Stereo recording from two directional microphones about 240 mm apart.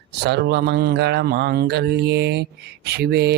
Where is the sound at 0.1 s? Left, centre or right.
Right.